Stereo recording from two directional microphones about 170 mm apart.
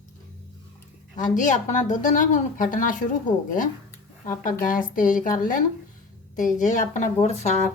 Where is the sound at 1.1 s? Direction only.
45° left (ahead or behind).